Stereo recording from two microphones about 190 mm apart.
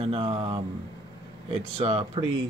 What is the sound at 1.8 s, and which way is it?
Speech, 30° right (ahead or behind).